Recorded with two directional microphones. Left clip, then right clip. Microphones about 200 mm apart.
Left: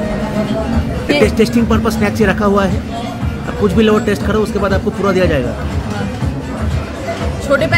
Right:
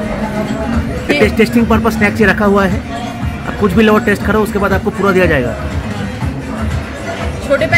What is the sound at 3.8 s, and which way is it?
A man's voice, 20° right (ahead or behind).